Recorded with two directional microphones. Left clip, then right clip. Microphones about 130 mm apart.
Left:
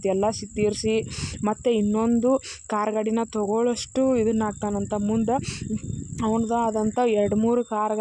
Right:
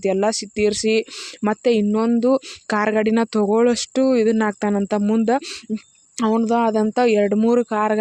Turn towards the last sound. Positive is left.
turn(degrees=-30)  # may be behind; listen again after turning